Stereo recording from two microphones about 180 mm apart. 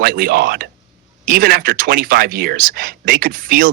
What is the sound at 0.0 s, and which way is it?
A man's voice, 55° right (ahead or behind).